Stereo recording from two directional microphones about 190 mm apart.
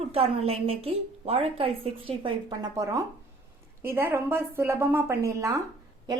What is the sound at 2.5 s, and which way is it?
A woman's voice, 20° right (ahead or behind).